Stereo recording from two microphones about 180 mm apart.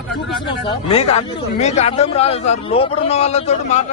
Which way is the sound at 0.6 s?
30° left (ahead or behind).